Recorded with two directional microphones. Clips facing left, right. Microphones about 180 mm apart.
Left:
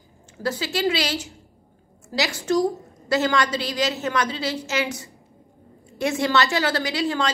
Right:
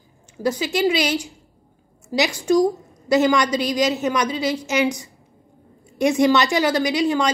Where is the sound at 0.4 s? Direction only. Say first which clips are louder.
Right 4 dB; 15° right (ahead or behind).